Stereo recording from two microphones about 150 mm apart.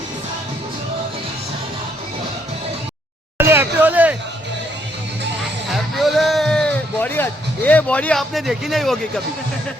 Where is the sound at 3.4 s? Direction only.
15° right (ahead or behind).